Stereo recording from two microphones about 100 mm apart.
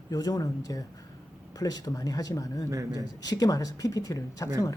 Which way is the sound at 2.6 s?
35° right (ahead or behind).